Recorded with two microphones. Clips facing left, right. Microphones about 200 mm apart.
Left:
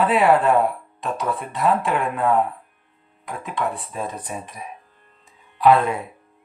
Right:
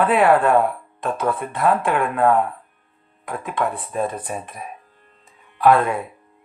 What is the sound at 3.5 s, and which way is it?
Speech, 55° right (ahead or behind).